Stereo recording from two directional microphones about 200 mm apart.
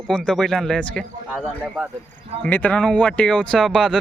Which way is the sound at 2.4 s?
10° left (ahead or behind).